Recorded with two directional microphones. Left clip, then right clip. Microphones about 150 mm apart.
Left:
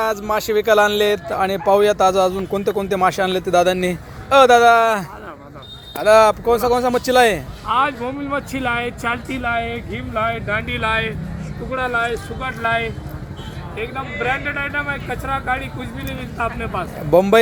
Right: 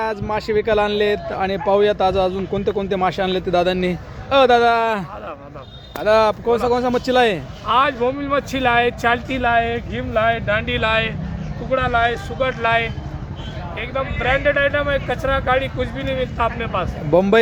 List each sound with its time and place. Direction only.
0.0 s speech: centre (ahead or behind)
7.7 s speech: 30° right (ahead or behind)
17.1 s speech: 5° right (ahead or behind)